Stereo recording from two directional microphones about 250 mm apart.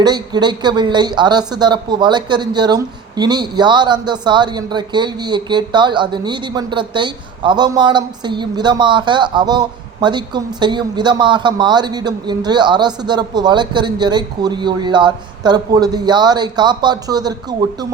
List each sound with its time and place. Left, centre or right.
0.0 s speech: centre